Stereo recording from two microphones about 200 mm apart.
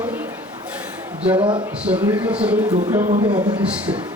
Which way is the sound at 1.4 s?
25° right (ahead or behind).